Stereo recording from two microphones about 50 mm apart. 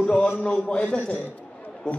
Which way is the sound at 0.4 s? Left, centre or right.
Left.